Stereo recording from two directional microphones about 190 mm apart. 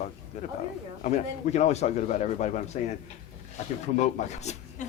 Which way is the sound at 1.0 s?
35° left (ahead or behind).